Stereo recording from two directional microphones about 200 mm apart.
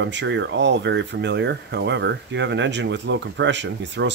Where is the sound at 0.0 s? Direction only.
60° right (ahead or behind).